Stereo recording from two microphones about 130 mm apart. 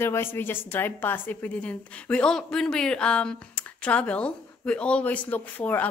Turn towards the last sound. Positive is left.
turn(degrees=10)  # may be behind; listen again after turning